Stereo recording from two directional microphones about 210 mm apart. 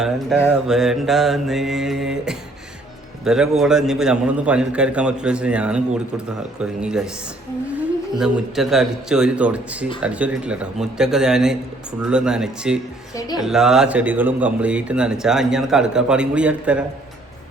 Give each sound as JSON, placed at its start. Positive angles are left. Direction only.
{"t": 0.7, "sound": "a man's voice", "side_deg": 0}
{"t": 8.2, "sound": "a man's voice", "side_deg": 0}
{"t": 13.1, "sound": "speech", "side_deg": 20}
{"t": 13.4, "sound": "a man's voice", "side_deg": 0}